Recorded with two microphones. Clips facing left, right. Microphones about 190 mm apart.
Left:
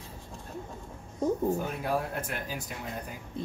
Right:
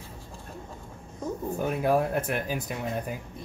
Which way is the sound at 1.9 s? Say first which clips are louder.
Right 8 dB; 60° right (ahead or behind).